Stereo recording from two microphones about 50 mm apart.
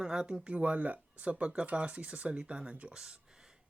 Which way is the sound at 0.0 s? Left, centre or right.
Centre.